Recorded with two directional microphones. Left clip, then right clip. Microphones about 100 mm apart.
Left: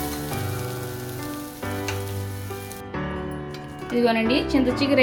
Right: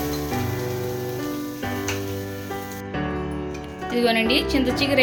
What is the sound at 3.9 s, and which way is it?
A woman's voice, 10° left (ahead or behind).